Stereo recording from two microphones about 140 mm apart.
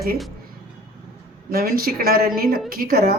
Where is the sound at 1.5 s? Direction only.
90° right.